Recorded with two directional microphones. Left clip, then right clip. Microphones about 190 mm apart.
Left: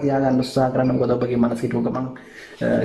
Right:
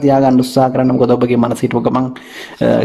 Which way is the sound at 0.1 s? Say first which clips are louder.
Right 9 dB; 25° right (ahead or behind).